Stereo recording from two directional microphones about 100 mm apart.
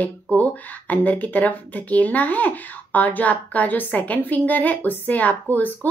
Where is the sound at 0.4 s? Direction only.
15° left (ahead or behind).